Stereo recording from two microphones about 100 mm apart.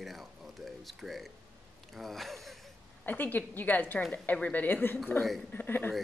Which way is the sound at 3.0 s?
20° left (ahead or behind).